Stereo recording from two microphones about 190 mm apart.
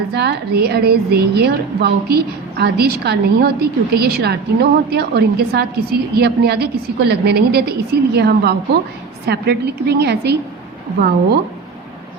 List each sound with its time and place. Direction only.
0.1 s a woman's voice: 60° right (ahead or behind)